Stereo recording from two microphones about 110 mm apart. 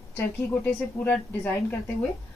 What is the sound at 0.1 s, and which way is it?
A woman's voice, 15° left (ahead or behind).